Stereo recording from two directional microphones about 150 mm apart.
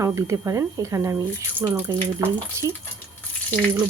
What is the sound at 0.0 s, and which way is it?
Speech, 20° right (ahead or behind).